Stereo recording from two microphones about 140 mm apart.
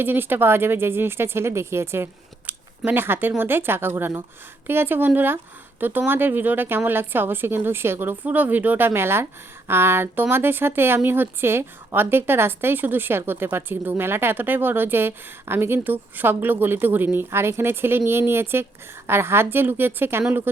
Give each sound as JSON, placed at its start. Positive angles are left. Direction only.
{"t": 0.0, "sound": "speech", "side_deg": -15}